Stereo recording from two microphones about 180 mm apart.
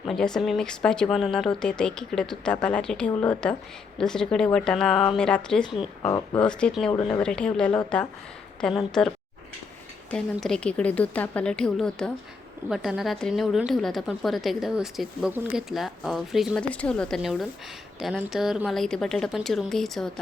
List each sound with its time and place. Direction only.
0.1 s a woman's voice: centre (ahead or behind)
6.0 s speech: 15° left (ahead or behind)
6.4 s a woman's voice: 5° left (ahead or behind)
10.4 s a woman's voice: 5° left (ahead or behind)